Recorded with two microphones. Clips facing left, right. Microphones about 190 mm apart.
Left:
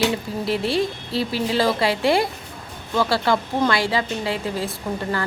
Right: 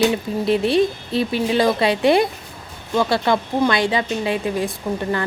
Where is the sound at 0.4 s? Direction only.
20° right (ahead or behind).